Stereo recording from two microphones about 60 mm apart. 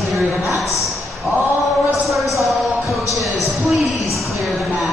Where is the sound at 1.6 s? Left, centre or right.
Centre.